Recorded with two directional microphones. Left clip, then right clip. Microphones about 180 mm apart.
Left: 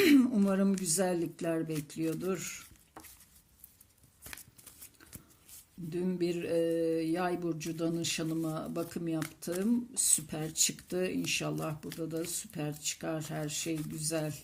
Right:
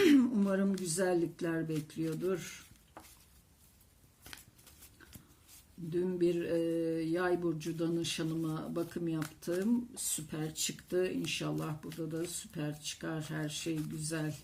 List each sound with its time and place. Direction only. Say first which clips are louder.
0.0 s speech: left 2 dB; 35° left (ahead or behind)
5.9 s speech: right 2 dB; 40° left (ahead or behind)